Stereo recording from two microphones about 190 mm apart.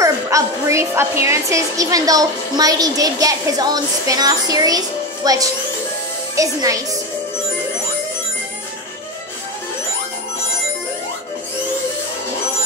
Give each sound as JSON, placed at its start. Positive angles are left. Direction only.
{"t": 0.0, "sound": "a woman's voice", "side_deg": -15}